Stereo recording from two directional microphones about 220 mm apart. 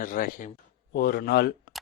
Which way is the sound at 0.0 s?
40° left (ahead or behind).